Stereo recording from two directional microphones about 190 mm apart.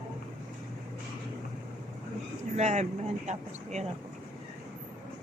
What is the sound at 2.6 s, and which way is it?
Speech, 35° right (ahead or behind).